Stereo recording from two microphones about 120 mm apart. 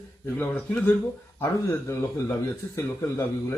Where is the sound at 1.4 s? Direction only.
20° left (ahead or behind).